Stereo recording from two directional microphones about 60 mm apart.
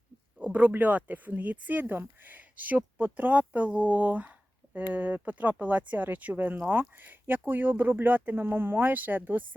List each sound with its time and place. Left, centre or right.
0.3 s speech: right